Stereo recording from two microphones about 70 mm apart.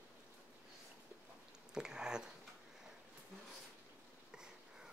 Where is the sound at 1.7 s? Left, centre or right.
Centre.